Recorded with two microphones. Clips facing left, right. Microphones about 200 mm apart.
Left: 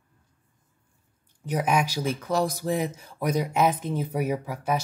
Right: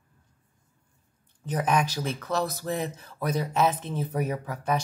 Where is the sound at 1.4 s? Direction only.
10° left (ahead or behind).